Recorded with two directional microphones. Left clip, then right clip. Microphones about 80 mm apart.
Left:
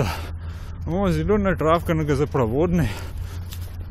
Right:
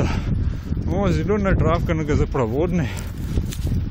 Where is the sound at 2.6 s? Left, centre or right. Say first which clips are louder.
Left 1 dB; left.